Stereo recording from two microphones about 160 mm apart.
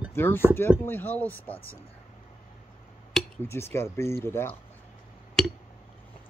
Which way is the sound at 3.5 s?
15° left (ahead or behind).